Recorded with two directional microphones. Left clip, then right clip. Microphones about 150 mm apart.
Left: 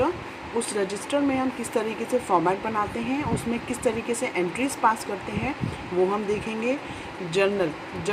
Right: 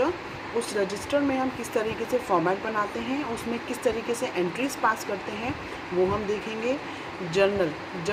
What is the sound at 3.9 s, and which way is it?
Speech, 25° left (ahead or behind).